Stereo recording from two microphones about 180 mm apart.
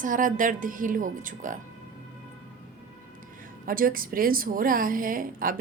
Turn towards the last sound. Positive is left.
turn(degrees=-50)  # may be behind; listen again after turning